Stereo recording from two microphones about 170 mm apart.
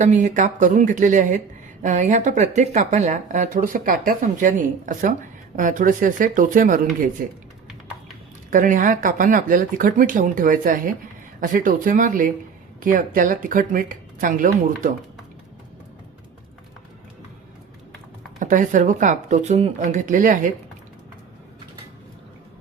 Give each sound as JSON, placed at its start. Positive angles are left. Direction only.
{"t": 0.0, "sound": "speech", "side_deg": -45}
{"t": 8.4, "sound": "speech", "side_deg": -50}
{"t": 18.3, "sound": "speech", "side_deg": -50}